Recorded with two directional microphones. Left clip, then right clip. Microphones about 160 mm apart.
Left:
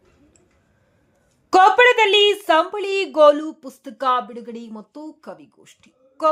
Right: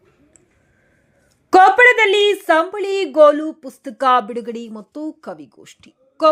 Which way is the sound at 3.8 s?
25° right (ahead or behind).